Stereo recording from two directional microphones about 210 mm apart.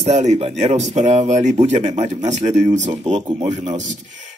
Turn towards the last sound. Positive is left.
turn(degrees=-30)  # may be behind; listen again after turning